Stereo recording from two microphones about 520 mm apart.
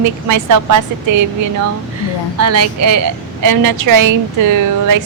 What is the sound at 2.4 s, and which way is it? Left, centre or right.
A woman's voice, right.